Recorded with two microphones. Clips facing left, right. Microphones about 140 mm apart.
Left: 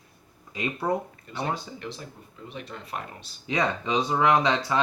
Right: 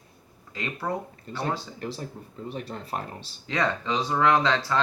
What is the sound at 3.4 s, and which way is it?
Speech, 15° left (ahead or behind).